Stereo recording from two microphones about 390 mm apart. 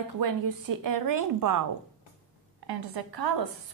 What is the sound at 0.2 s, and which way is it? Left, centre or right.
A woman's voice, right.